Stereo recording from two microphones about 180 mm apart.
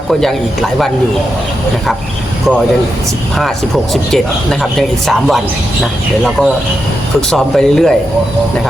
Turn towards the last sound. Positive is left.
turn(degrees=5)  # may be behind; listen again after turning